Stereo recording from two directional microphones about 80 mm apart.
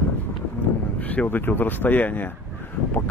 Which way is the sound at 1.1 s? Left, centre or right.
Left.